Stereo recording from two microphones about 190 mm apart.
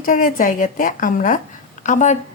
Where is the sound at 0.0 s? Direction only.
45° left (ahead or behind).